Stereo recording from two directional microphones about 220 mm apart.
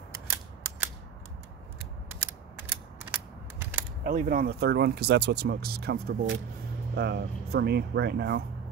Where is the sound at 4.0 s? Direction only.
35° right (ahead or behind).